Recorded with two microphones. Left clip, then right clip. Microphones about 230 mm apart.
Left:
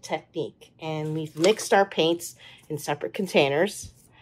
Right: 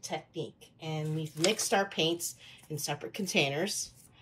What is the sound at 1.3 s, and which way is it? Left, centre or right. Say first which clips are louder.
Speech: left 8 dB; centre.